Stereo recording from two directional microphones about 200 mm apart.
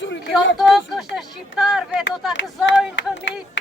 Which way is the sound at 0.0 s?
65° left (ahead or behind).